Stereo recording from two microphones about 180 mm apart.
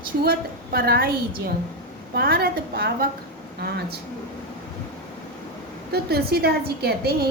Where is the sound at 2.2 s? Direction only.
55° right (ahead or behind).